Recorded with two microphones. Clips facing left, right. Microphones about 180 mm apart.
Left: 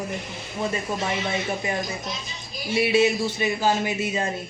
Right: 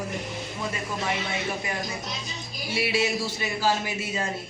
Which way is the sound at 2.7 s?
20° left (ahead or behind).